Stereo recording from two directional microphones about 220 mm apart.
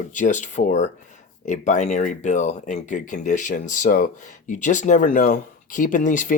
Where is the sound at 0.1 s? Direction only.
35° left (ahead or behind).